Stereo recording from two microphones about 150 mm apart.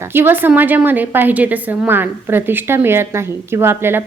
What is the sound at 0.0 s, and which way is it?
A woman's voice, 15° right (ahead or behind).